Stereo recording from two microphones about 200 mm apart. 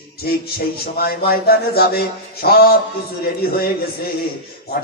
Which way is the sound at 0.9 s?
50° left (ahead or behind).